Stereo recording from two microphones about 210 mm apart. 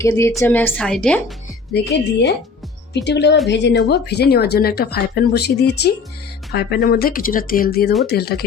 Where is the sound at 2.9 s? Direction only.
55° left (ahead or behind).